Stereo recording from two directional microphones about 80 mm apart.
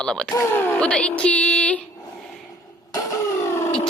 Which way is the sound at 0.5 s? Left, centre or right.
Left.